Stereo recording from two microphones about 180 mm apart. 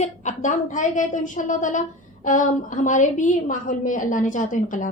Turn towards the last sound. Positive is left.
turn(degrees=45)  # may be behind; listen again after turning